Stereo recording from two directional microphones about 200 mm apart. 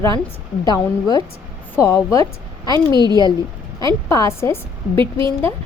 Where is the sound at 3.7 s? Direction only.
15° left (ahead or behind).